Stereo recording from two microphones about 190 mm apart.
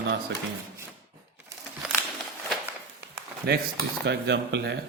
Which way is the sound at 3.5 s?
60° right (ahead or behind).